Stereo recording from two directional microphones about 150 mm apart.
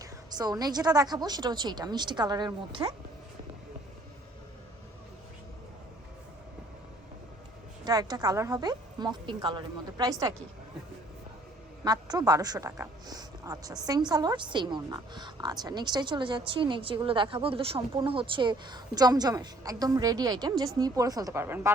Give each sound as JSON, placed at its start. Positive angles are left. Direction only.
{"t": 0.0, "sound": "a woman's voice", "side_deg": -25}
{"t": 7.9, "sound": "a woman's voice", "side_deg": -25}
{"t": 11.9, "sound": "a woman's voice", "side_deg": -25}